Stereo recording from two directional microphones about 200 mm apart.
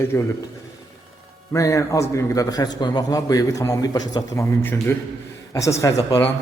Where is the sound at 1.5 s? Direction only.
15° left (ahead or behind).